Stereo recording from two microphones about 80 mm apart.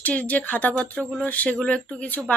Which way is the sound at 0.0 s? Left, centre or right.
Centre.